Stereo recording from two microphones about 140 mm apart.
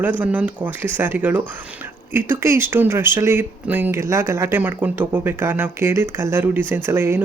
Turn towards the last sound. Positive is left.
turn(degrees=-15)  # may be behind; listen again after turning